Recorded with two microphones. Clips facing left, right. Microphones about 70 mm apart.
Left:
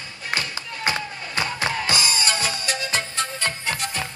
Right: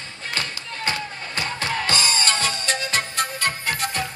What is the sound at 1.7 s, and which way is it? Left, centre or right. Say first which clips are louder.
Music: right 1 dB; right.